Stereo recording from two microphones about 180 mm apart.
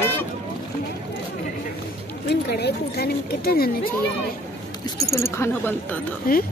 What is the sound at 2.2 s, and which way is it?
Speech, 65° left (ahead or behind).